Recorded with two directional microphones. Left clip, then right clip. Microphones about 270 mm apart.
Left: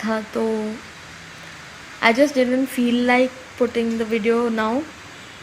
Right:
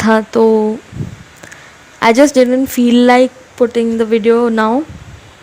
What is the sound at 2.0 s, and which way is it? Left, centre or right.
Speech, right.